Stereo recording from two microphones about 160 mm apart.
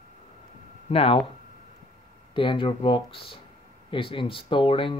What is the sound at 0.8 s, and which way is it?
Speech, 35° left (ahead or behind).